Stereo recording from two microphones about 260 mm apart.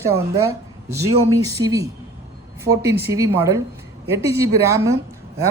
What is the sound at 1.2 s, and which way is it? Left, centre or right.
Speech, centre.